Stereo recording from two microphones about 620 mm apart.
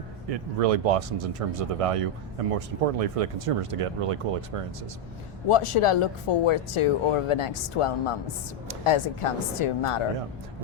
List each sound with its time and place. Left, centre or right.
0.3 s speech: right
5.5 s speech: left